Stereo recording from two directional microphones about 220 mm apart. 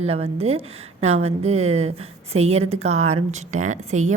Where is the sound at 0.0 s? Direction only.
25° right (ahead or behind).